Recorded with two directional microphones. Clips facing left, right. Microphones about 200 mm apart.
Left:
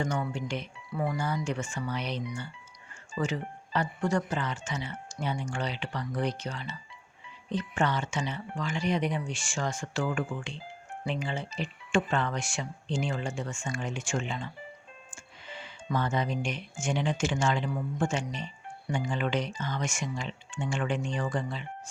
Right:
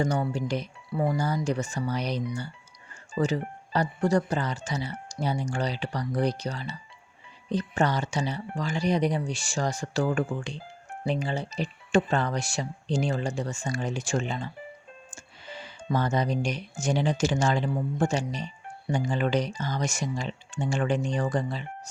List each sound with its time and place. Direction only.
0.0 s speech: 35° right (ahead or behind)